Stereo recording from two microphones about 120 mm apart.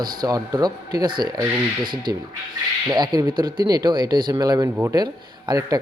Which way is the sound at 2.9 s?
35° right (ahead or behind).